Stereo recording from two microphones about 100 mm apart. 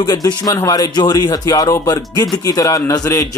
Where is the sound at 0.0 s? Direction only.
45° left (ahead or behind).